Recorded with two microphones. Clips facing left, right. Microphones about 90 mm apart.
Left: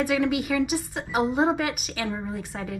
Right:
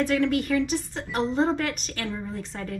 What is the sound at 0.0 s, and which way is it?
A woman's voice, 10° left (ahead or behind).